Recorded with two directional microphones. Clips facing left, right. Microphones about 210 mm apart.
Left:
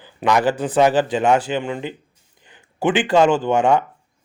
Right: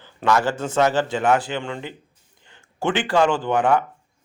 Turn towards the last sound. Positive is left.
turn(degrees=25)  # may be behind; listen again after turning